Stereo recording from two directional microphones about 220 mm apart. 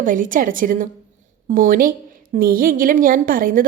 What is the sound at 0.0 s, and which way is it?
A woman's voice, 35° right (ahead or behind).